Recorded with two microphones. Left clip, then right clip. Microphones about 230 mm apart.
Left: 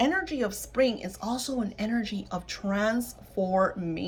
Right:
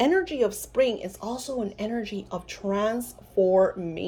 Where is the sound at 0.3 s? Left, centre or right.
Centre.